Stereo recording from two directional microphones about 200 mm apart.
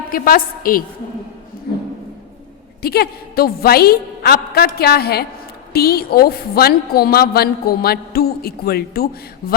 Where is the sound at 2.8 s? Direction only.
50° left (ahead or behind).